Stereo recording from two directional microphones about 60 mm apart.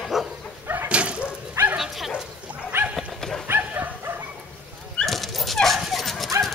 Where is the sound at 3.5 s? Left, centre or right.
Right.